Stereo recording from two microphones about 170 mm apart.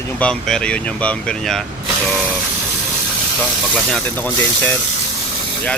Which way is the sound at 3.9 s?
10° left (ahead or behind).